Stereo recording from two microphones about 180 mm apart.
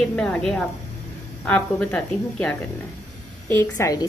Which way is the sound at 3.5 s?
15° left (ahead or behind).